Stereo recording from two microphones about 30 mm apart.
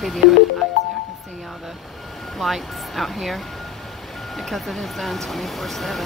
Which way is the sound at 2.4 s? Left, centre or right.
Centre.